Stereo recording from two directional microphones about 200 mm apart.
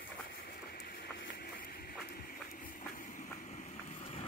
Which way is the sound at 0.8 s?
50° left (ahead or behind).